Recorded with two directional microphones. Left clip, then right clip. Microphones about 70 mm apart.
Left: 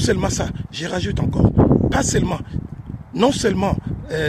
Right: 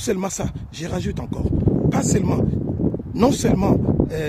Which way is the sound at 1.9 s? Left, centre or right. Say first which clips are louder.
Left 2 dB; right.